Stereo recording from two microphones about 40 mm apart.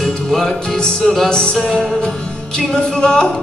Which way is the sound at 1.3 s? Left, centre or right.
Centre.